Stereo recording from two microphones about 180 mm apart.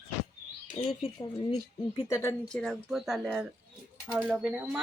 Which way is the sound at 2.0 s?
15° left (ahead or behind).